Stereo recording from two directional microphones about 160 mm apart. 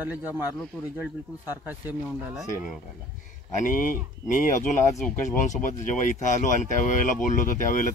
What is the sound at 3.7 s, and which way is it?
Speech, 55° left (ahead or behind).